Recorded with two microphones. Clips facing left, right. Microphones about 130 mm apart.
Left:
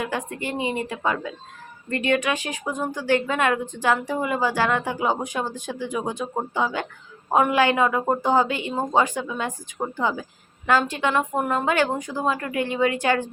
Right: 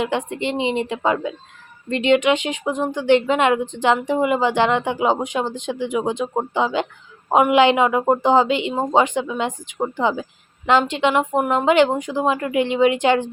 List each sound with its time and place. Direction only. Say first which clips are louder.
0.0 s speech: right 6 dB; 20° right (ahead or behind)